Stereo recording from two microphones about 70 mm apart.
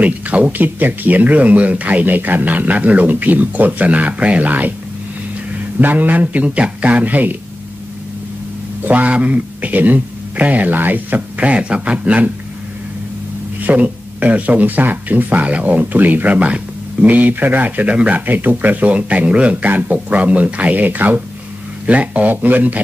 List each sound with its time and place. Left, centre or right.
0.0 s speech: right
5.8 s speech: right
8.8 s speech: right
13.7 s speech: right